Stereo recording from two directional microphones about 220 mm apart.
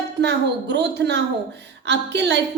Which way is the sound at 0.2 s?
50° right (ahead or behind).